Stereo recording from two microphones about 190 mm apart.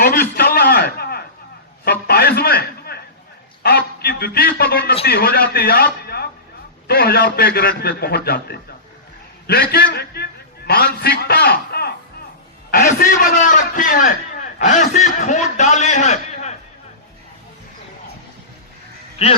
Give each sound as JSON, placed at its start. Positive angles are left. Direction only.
{"t": 0.0, "sound": "a sound", "side_deg": 55}
{"t": 3.6, "sound": "a man's voice", "side_deg": 55}
{"t": 19.2, "sound": "a man's voice", "side_deg": 35}